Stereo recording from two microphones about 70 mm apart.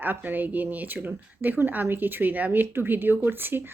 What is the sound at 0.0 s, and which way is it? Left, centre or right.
Speech, right.